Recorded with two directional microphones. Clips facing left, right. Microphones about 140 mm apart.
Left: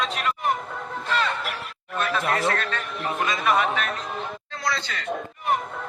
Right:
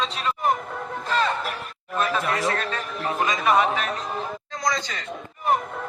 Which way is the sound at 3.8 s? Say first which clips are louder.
Right 1 dB; 35° right (ahead or behind).